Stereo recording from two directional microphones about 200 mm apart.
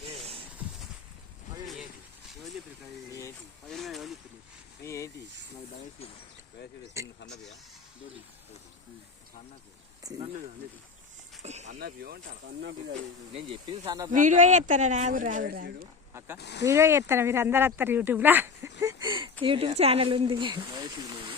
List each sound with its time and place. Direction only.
1.6 s a sound: centre (ahead or behind)
3.7 s a sound: centre (ahead or behind)
4.8 s a sound: 15° left (ahead or behind)
7.0 s speech: 15° right (ahead or behind)
10.0 s speech: 15° right (ahead or behind)
11.4 s a sound: 35° right (ahead or behind)
11.8 s speech: 50° right (ahead or behind)
13.3 s speech: 25° right (ahead or behind)
14.1 s speech: 40° right (ahead or behind)
16.1 s speech: 10° right (ahead or behind)
16.4 s speech: 55° left (ahead or behind)
16.6 s speech: 15° right (ahead or behind)